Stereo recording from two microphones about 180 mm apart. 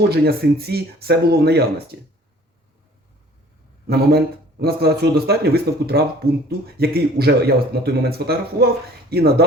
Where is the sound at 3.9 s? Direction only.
60° right (ahead or behind).